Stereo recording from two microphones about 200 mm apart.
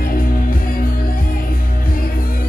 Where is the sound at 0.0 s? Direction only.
45° left (ahead or behind).